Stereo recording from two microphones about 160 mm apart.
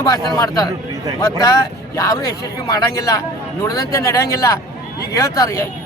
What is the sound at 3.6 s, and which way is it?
Speech, 20° left (ahead or behind).